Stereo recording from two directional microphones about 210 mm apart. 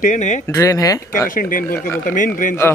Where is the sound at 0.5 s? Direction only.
15° left (ahead or behind).